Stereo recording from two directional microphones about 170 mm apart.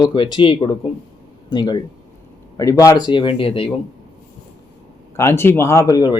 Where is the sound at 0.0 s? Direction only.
30° left (ahead or behind).